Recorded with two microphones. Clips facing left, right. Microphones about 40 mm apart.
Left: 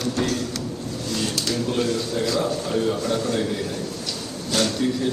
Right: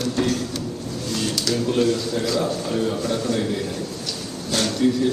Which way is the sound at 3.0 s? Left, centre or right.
Left.